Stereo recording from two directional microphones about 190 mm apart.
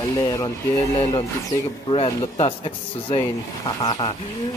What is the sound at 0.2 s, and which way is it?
Speech, 20° left (ahead or behind).